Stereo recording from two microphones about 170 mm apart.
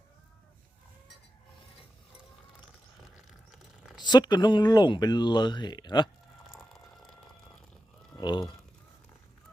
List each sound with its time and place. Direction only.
3.9 s speech: 25° left (ahead or behind)
6.5 s a sound: centre (ahead or behind)
8.2 s speech: 25° left (ahead or behind)